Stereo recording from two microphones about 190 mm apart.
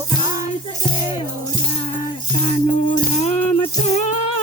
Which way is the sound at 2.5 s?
40° left (ahead or behind).